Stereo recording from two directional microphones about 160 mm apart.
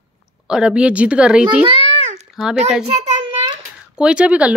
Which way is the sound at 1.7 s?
40° right (ahead or behind).